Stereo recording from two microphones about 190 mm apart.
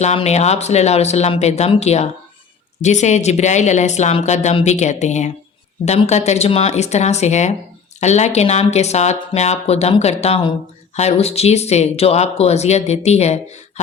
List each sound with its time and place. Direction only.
0.0 s speech: 35° left (ahead or behind)